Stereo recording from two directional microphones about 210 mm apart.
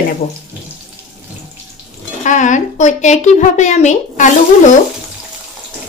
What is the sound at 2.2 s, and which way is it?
A woman's voice, 35° left (ahead or behind).